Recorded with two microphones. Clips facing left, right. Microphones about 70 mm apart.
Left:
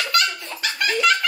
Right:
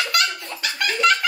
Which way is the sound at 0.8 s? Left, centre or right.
Centre.